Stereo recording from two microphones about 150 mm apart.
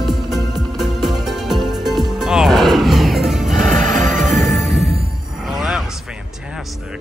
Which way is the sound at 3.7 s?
60° right (ahead or behind).